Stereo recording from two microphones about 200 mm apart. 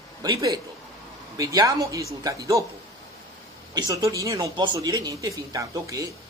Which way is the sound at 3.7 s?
15° right (ahead or behind).